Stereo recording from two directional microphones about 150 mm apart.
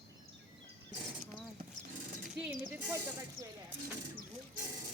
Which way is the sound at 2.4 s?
5° right (ahead or behind).